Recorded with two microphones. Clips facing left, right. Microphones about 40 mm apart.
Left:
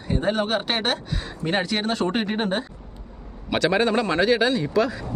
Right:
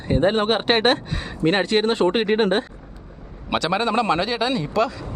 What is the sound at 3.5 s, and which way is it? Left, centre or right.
Speech, centre.